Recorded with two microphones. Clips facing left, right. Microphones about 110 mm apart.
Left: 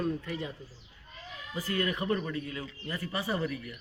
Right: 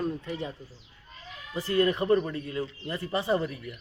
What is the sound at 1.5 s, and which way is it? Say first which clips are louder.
A man's voice: right 7 dB; 30° right (ahead or behind).